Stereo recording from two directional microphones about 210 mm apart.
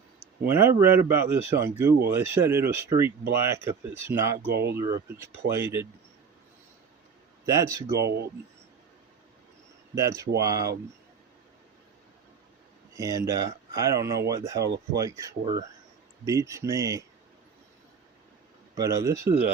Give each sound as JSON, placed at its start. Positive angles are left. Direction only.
{"t": 0.4, "sound": "speech", "side_deg": -10}
{"t": 4.4, "sound": "speech", "side_deg": -50}
{"t": 4.7, "sound": "speech", "side_deg": -15}
{"t": 7.4, "sound": "speech", "side_deg": -15}
{"t": 7.9, "sound": "speech", "side_deg": -50}
{"t": 9.9, "sound": "speech", "side_deg": -15}
{"t": 13.0, "sound": "speech", "side_deg": -15}
{"t": 18.8, "sound": "speech", "side_deg": -15}